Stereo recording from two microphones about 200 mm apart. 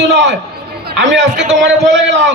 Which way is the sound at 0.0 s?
60° right (ahead or behind).